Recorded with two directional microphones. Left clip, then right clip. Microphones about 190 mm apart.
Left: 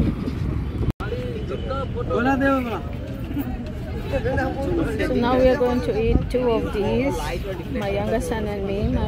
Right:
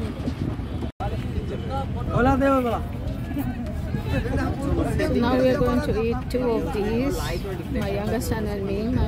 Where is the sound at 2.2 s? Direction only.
25° right (ahead or behind).